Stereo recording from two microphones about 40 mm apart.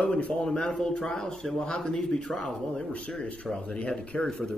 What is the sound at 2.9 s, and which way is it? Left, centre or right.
Speech, left.